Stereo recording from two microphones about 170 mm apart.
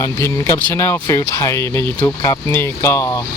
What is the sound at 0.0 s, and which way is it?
Speech, 15° left (ahead or behind).